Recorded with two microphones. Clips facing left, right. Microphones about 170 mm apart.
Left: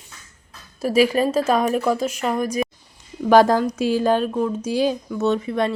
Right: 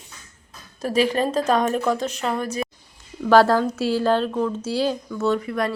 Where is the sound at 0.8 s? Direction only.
10° left (ahead or behind).